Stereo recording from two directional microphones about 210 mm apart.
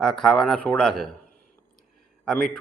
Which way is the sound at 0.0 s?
Centre (ahead or behind).